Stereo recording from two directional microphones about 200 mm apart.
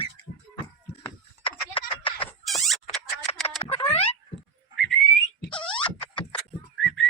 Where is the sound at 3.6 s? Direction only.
30° left (ahead or behind).